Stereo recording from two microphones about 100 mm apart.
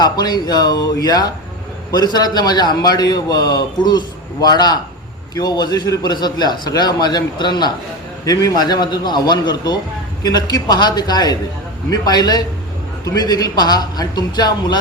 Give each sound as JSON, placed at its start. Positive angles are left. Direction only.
{"t": 0.0, "sound": "a man's voice", "side_deg": 40}